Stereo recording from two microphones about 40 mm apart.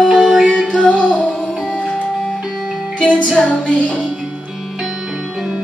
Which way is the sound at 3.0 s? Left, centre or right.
Left.